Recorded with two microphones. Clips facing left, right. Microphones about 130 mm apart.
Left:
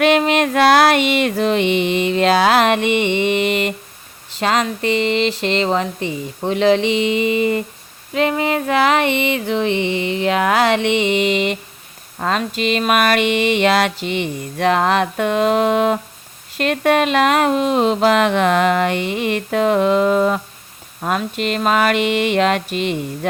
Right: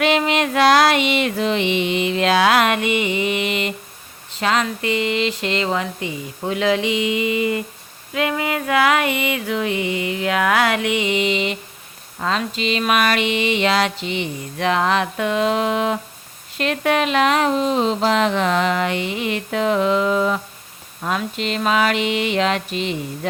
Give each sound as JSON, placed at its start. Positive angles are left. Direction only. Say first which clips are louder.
{"t": 0.0, "sound": "speech", "louder": "left 4 dB", "side_deg": 50}
{"t": 4.4, "sound": "speech", "louder": "left 2 dB", "side_deg": 35}
{"t": 8.1, "sound": "a sound", "louder": "left 4 dB", "side_deg": 30}
{"t": 11.2, "sound": "speech", "louder": "left 3 dB", "side_deg": 50}